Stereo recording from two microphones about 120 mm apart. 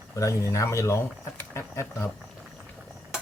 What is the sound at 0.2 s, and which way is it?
Speech, 25° left (ahead or behind).